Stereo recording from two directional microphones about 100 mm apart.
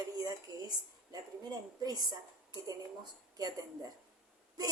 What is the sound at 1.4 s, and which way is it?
A woman's voice, 40° right (ahead or behind).